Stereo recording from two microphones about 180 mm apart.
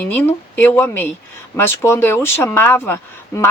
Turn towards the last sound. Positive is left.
turn(degrees=15)  # may be behind; listen again after turning